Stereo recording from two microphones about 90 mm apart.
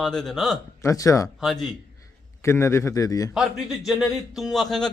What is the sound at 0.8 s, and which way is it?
Speech, 40° left (ahead or behind).